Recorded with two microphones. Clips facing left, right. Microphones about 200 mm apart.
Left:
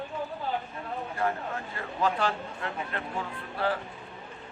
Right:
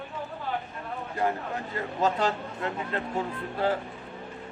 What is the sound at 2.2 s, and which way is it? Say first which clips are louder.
Speech: right 2 dB; 25° right (ahead or behind).